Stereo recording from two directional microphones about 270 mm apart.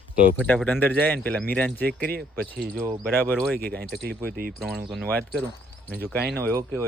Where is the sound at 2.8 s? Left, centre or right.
Centre.